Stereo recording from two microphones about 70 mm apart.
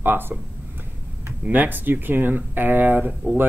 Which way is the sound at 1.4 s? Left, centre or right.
Right.